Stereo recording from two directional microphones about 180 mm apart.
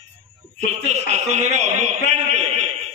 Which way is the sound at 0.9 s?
40° right (ahead or behind).